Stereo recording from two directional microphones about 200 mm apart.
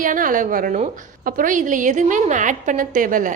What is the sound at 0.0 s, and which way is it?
A woman's voice, 40° right (ahead or behind).